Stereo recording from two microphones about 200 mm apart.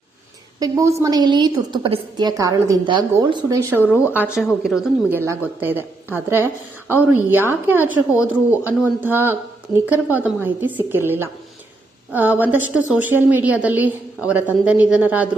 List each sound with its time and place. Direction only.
0.6 s a woman's voice: 15° right (ahead or behind)
3.8 s a woman's voice: 10° left (ahead or behind)
4.1 s a woman's voice: 10° right (ahead or behind)
5.1 s a woman's voice: 10° right (ahead or behind)